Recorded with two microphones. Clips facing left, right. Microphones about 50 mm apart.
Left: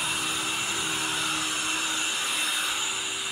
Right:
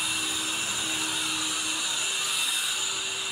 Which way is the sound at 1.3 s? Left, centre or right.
Left.